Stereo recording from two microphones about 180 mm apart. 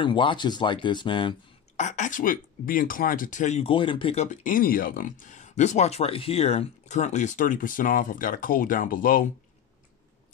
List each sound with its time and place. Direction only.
0.0 s speech: 25° left (ahead or behind)
1.8 s speech: 45° left (ahead or behind)